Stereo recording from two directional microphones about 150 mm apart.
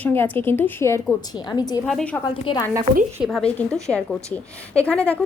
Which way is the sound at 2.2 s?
30° left (ahead or behind).